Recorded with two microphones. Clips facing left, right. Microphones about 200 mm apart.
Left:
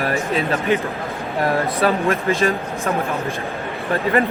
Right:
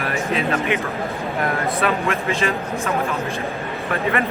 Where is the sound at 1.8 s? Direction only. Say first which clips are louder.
Left 3 dB; 35° left (ahead or behind).